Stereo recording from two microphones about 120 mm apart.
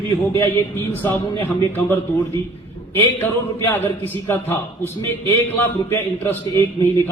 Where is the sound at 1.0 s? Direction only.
20° left (ahead or behind).